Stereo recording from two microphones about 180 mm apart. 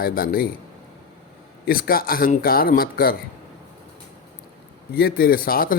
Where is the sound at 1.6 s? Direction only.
55° left (ahead or behind).